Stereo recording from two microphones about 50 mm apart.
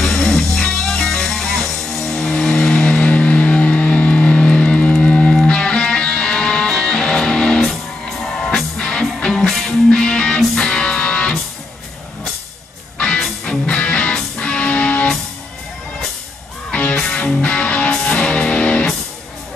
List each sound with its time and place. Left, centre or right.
0.0 s music: centre
13.0 s music: centre
16.9 s music: left